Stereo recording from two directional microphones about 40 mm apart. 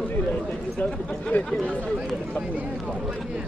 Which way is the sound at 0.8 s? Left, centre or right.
Left.